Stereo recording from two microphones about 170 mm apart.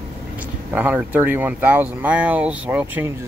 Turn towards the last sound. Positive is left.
turn(degrees=-10)  # may be behind; listen again after turning